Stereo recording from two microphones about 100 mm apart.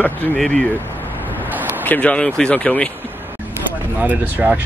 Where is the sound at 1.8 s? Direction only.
15° left (ahead or behind).